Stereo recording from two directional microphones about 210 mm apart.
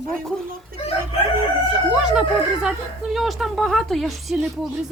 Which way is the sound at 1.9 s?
5° right (ahead or behind).